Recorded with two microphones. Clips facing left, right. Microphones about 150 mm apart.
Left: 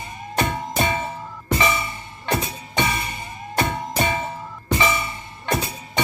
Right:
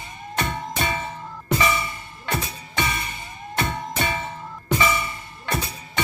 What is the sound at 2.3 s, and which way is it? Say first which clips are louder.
Music: left 4 dB; 30° left (ahead or behind).